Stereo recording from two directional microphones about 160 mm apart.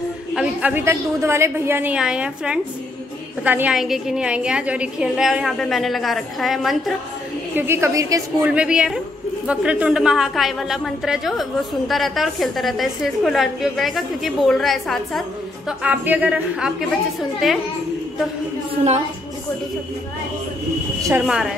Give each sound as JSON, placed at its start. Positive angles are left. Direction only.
{"t": 0.3, "sound": "a woman's voice", "side_deg": -5}
{"t": 7.5, "sound": "a woman's voice", "side_deg": -15}
{"t": 8.5, "sound": "a woman's voice", "side_deg": -5}
{"t": 21.3, "sound": "a woman's voice", "side_deg": -5}